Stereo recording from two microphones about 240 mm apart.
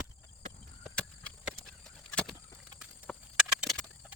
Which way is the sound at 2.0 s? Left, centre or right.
Centre.